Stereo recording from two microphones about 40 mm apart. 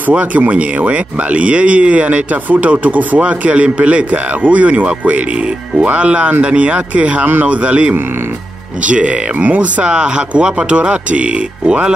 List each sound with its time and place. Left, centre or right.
0.1 s speech: right
9.9 s speech: right